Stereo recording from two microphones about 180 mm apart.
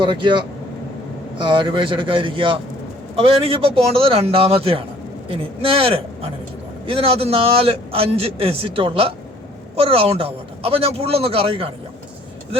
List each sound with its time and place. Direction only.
0.0 s a man's voice: 25° right (ahead or behind)